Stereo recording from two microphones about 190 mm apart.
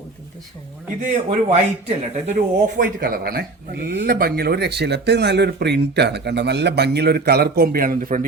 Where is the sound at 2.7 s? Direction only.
50° right (ahead or behind).